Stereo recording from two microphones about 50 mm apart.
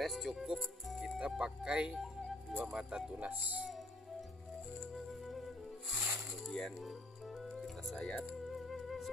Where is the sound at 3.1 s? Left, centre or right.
Right.